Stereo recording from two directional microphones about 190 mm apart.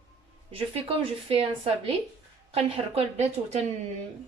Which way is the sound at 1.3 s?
30° right (ahead or behind).